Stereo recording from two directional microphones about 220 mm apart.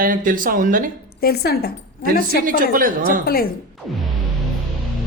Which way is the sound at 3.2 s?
45° left (ahead or behind).